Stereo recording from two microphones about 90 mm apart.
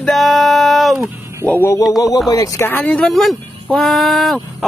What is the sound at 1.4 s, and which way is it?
Speech, 20° left (ahead or behind).